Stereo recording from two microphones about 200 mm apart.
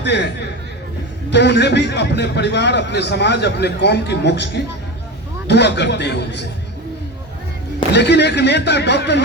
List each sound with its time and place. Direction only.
0.0 s speech: 60° left (ahead or behind)
1.3 s a man's voice: 60° left (ahead or behind)
7.9 s a man's voice: 60° left (ahead or behind)